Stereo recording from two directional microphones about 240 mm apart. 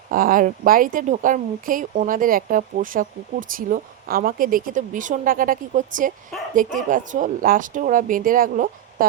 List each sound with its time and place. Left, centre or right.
0.1 s speech: right